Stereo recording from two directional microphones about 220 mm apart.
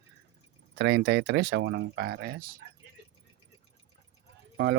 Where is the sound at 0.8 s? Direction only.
50° right (ahead or behind).